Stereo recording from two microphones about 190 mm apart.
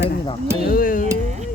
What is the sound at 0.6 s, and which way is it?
Speech, 45° left (ahead or behind).